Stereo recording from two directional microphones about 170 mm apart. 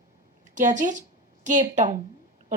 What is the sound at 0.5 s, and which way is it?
A woman's voice, 45° right (ahead or behind).